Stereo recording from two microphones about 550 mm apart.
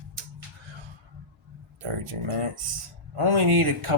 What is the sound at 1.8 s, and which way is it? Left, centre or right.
Speech, right.